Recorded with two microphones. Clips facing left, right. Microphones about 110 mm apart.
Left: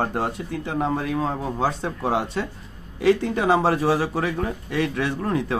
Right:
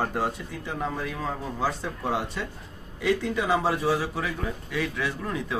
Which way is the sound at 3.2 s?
45° left (ahead or behind).